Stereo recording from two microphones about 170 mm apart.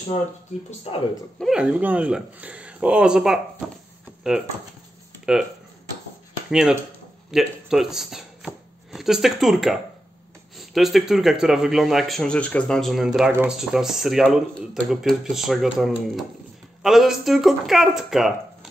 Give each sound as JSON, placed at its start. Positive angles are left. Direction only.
{"t": 0.7, "sound": "speech", "side_deg": 35}
{"t": 1.4, "sound": "a man's voice", "side_deg": -5}
{"t": 5.3, "sound": "a man's voice", "side_deg": -5}
{"t": 6.5, "sound": "a man's voice", "side_deg": -5}